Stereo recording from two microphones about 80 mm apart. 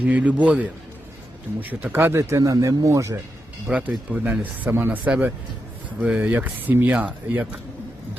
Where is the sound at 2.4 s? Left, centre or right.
Right.